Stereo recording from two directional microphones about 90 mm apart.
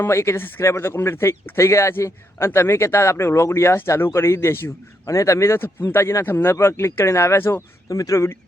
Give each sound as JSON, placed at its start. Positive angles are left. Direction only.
{"t": 0.0, "sound": "speech", "side_deg": 30}
{"t": 7.9, "sound": "speech", "side_deg": 40}